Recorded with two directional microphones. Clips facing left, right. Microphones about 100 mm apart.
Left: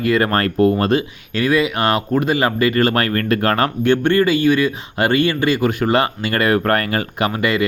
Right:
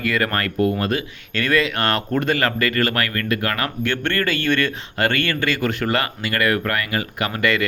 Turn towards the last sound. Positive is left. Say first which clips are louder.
# left 3 dB
turn(degrees=20)  # may be behind; listen again after turning